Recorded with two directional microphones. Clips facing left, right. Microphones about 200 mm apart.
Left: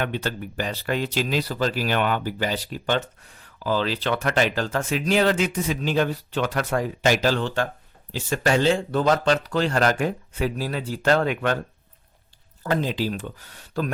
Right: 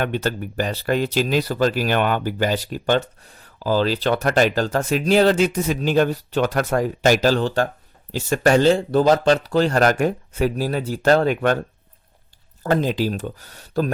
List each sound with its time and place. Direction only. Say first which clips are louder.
0.0 s speech: right 4 dB; 45° right (ahead or behind)
12.6 s speech: right 4 dB; 45° right (ahead or behind)